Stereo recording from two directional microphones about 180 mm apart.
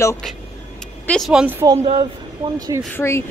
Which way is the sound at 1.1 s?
Centre (ahead or behind).